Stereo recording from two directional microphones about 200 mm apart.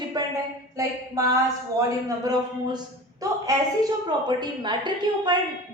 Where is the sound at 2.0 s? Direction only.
20° right (ahead or behind).